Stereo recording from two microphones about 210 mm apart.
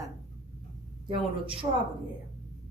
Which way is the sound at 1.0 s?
25° right (ahead or behind).